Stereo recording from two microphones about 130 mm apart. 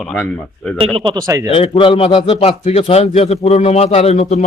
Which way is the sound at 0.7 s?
45° right (ahead or behind).